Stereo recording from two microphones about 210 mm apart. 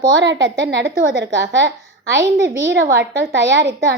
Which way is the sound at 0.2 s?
60° right (ahead or behind).